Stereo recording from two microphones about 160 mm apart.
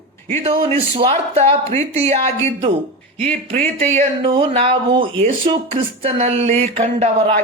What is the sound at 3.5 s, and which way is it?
Speech, 45° right (ahead or behind).